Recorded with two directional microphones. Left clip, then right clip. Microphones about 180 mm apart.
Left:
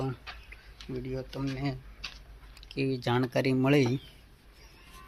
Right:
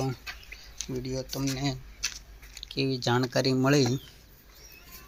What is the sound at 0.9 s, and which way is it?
Speech, 30° right (ahead or behind).